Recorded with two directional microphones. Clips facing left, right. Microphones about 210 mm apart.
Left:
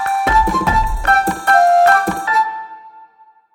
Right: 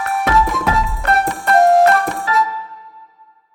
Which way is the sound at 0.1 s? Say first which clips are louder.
Even; centre (ahead or behind).